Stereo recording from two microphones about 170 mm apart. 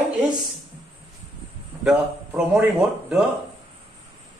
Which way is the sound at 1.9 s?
5° right (ahead or behind).